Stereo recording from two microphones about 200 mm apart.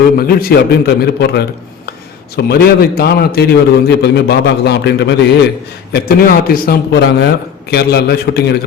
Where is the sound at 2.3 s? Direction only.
50° left (ahead or behind).